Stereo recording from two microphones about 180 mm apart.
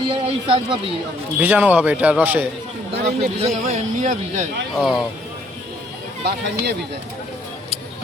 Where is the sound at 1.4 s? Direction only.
10° right (ahead or behind).